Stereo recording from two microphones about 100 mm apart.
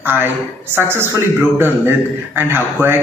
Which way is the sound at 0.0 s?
20° right (ahead or behind).